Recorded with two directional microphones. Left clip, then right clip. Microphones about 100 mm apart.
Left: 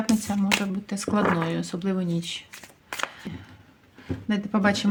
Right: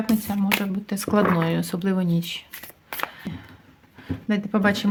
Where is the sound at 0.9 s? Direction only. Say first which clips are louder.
Right 3 dB; 50° right (ahead or behind).